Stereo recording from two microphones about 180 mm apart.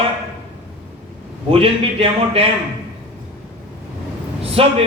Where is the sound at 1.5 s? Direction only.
30° right (ahead or behind).